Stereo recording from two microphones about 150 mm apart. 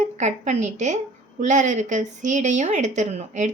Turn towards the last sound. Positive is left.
turn(degrees=-50)  # may be behind; listen again after turning